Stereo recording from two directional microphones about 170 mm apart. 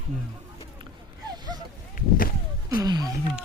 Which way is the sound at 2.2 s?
60° left (ahead or behind).